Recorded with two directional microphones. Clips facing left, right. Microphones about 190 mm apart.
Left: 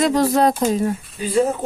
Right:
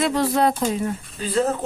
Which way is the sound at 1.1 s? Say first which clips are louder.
Left 3 dB; 10° left (ahead or behind).